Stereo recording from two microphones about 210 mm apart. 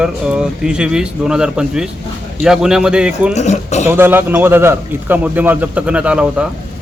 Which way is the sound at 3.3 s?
35° left (ahead or behind).